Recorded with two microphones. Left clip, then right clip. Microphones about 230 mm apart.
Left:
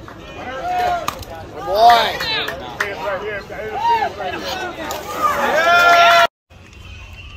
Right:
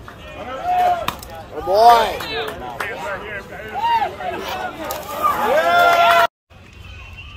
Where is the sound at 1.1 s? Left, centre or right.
Centre.